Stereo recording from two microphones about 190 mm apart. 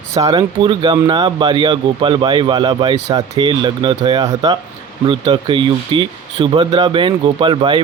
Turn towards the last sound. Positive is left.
turn(degrees=-25)  # may be behind; listen again after turning